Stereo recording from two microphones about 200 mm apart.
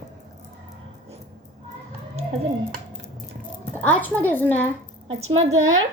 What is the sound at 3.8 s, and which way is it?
Speech, 10° left (ahead or behind).